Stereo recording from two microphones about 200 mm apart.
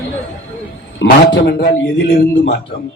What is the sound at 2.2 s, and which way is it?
Speech, 50° left (ahead or behind).